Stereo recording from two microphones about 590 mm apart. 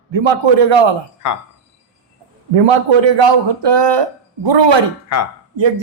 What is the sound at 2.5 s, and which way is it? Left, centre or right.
Speech, right.